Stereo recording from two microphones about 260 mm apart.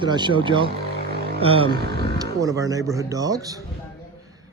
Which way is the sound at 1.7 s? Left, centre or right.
Right.